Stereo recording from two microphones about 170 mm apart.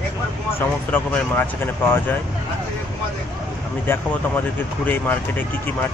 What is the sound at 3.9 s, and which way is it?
Speech, 10° left (ahead or behind).